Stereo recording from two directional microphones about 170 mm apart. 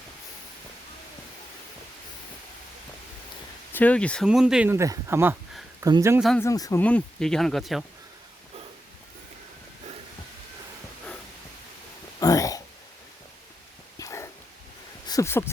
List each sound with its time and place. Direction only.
3.7 s speech: 10° left (ahead or behind)
4.3 s speech: 5° right (ahead or behind)
6.1 s speech: centre (ahead or behind)
6.4 s speech: 20° left (ahead or behind)
6.8 s speech: 5° left (ahead or behind)
12.2 s a sound: 20° left (ahead or behind)
14.0 s dog: 15° left (ahead or behind)
15.0 s a sound: 20° left (ahead or behind)